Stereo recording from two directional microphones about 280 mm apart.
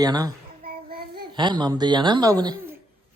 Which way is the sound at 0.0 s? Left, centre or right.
Centre.